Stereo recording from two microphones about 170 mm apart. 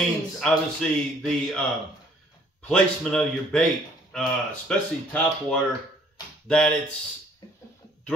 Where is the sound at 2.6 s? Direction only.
5° left (ahead or behind).